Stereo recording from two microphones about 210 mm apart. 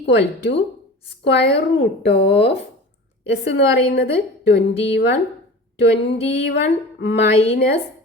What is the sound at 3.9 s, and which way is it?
A woman's voice, 55° left (ahead or behind).